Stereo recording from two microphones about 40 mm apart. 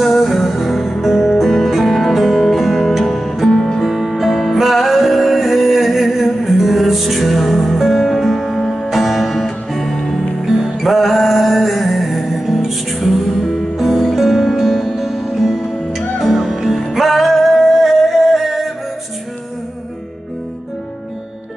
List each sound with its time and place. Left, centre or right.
0.0 s music: centre
10.4 s music: centre